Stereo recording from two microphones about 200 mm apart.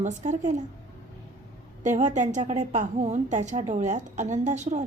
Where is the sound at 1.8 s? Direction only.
35° right (ahead or behind).